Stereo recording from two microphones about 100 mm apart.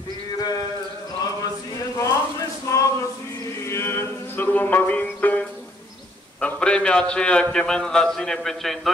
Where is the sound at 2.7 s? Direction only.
30° left (ahead or behind).